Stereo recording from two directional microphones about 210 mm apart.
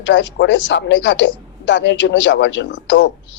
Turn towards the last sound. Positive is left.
turn(degrees=60)  # may be behind; listen again after turning